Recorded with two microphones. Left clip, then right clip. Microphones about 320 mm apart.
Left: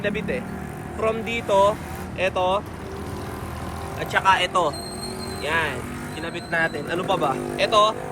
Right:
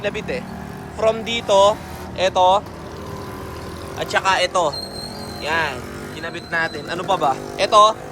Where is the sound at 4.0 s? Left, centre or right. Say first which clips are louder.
Right 1 dB; centre.